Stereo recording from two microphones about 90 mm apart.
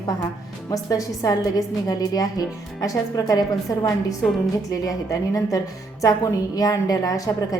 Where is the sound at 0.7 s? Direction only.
40° left (ahead or behind).